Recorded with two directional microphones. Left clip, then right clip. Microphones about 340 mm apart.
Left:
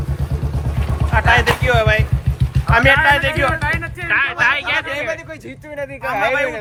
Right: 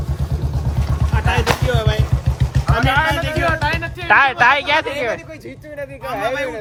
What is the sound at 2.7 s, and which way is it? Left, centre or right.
Speech, centre.